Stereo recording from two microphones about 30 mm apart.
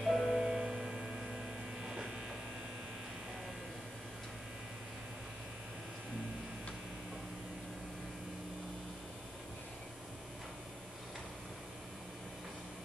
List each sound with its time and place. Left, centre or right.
0.0 s music: centre
0.4 s mains hum: right